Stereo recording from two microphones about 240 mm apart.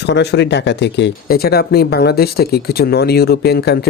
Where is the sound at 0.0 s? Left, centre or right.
Left.